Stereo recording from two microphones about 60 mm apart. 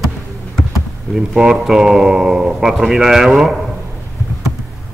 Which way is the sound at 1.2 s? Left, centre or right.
Centre.